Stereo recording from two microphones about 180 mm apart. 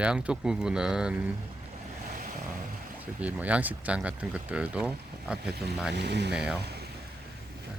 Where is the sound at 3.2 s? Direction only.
10° right (ahead or behind).